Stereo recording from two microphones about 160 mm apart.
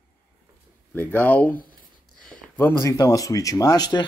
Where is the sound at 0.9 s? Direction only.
10° left (ahead or behind).